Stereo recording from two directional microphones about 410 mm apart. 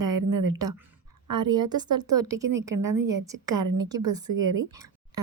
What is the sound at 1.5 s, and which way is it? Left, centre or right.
Speech, centre.